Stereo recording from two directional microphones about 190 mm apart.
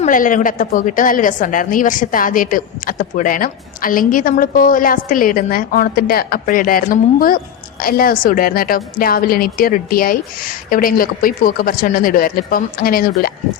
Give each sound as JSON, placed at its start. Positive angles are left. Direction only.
{"t": 0.0, "sound": "a woman's voice", "side_deg": 45}